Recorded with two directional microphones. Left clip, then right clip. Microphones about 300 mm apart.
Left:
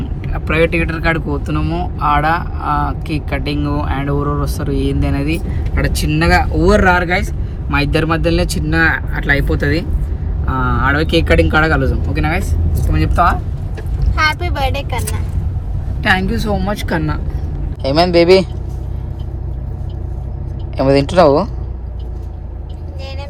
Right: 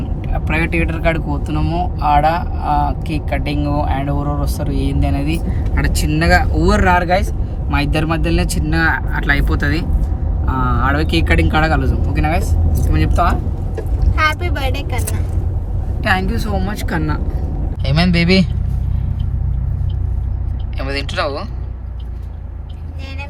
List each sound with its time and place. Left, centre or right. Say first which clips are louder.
0.2 s speech: left 5 dB; centre
4.1 s speech: left 3 dB; centre
4.5 s speech: left 3 dB; centre
17.8 s speech: left 7 dB; centre
20.7 s speech: left 10 dB; left